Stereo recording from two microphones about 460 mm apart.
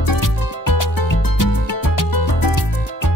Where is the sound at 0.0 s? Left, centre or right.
Left.